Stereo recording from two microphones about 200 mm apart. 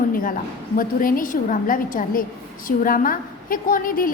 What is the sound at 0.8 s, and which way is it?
A woman's voice, 45° left (ahead or behind).